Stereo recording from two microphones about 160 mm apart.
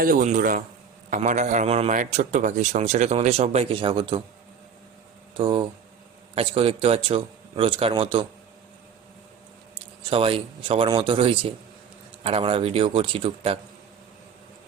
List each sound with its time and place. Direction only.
0.0 s a man's voice: 60° right (ahead or behind); by 4.2 s 30° right (ahead or behind)
5.4 s speech: 30° right (ahead or behind)
10.1 s speech: 35° right (ahead or behind)